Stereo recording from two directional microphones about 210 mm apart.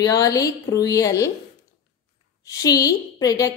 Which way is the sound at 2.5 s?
15° left (ahead or behind).